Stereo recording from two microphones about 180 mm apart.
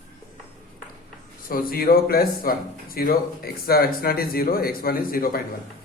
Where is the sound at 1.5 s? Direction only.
55° left (ahead or behind).